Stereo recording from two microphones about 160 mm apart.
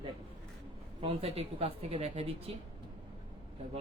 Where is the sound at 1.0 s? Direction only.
40° right (ahead or behind).